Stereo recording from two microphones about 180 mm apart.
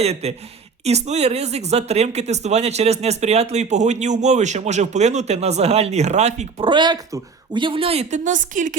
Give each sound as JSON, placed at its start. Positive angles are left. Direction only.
{"t": 0.0, "sound": "speech", "side_deg": -35}
{"t": 6.7, "sound": "speech", "side_deg": -25}